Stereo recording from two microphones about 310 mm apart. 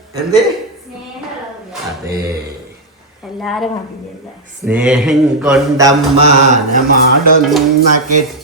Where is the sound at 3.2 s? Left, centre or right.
Centre.